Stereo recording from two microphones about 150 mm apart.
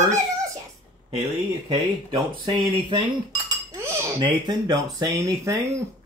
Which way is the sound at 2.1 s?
30° right (ahead or behind).